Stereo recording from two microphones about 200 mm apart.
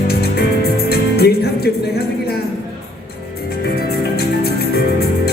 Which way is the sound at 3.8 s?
50° left (ahead or behind).